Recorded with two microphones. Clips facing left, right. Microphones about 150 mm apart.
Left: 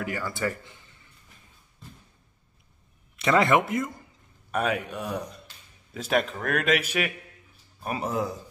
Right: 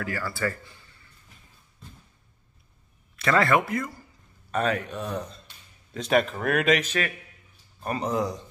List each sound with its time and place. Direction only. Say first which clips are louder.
0.0 s a man's voice: even; 20° left (ahead or behind)
3.2 s a man's voice: left 1 dB; 20° left (ahead or behind)
4.5 s speech: right 1 dB; 10° left (ahead or behind)
6.8 s speech: even; 10° left (ahead or behind)